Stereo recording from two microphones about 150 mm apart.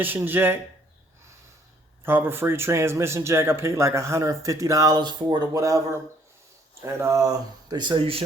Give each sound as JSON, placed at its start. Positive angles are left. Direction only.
{"t": 0.0, "sound": "speech", "side_deg": -15}
{"t": 2.0, "sound": "speech", "side_deg": -15}